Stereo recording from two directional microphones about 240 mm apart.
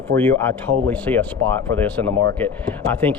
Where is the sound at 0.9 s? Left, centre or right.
Centre.